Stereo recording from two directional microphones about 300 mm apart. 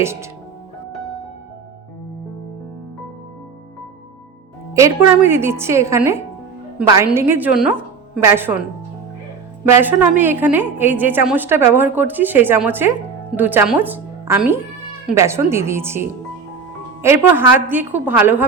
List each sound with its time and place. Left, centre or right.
0.0 s a woman's voice: centre
4.7 s a woman's voice: centre
10.0 s a woman's voice: centre